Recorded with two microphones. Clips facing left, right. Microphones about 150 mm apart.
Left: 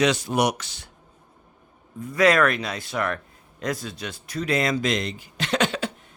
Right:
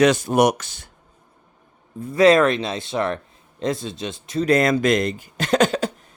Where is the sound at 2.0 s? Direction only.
25° right (ahead or behind).